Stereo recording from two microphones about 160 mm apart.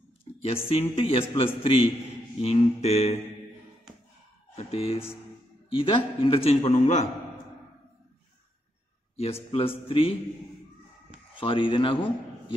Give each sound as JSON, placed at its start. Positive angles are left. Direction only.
{"t": 0.4, "sound": "a man's voice", "side_deg": 35}
{"t": 4.6, "sound": "a man's voice", "side_deg": 40}
{"t": 9.1, "sound": "a man's voice", "side_deg": 40}
{"t": 11.3, "sound": "a man's voice", "side_deg": 30}